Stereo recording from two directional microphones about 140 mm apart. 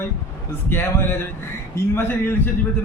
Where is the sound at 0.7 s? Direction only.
15° left (ahead or behind).